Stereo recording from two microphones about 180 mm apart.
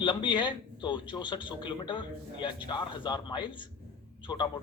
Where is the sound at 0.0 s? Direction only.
25° left (ahead or behind).